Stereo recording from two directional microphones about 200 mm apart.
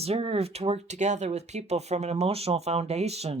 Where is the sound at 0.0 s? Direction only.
30° right (ahead or behind).